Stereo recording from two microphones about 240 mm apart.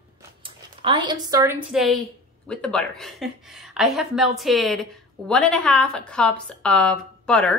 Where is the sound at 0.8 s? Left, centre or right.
Centre.